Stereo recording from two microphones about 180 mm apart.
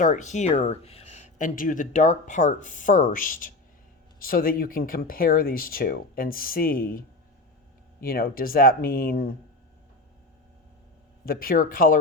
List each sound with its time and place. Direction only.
0.0 s speech: 45° left (ahead or behind)
8.0 s speech: 55° left (ahead or behind)
11.3 s speech: 55° left (ahead or behind)